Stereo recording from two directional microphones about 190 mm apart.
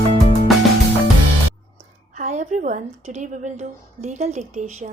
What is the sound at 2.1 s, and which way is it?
A woman's voice, 40° right (ahead or behind).